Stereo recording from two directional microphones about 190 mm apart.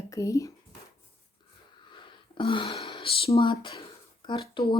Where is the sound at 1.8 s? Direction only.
25° left (ahead or behind).